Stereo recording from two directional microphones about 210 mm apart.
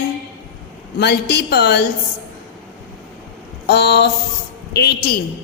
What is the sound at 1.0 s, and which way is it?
Speech, 50° left (ahead or behind).